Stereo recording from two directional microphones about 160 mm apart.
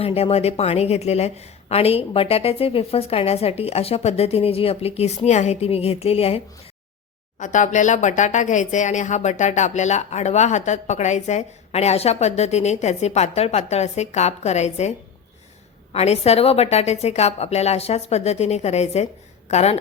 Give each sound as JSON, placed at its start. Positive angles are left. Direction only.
{"t": 0.0, "sound": "a woman's voice", "side_deg": 40}
{"t": 7.3, "sound": "speech", "side_deg": 50}